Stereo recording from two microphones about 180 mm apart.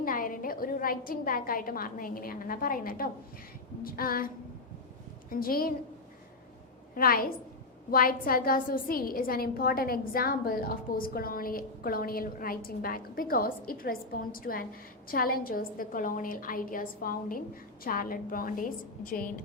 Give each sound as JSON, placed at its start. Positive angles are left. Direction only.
{"t": 0.0, "sound": "a woman's voice", "side_deg": 50}
{"t": 5.3, "sound": "a woman's voice", "side_deg": 55}
{"t": 6.9, "sound": "a woman's voice", "side_deg": 55}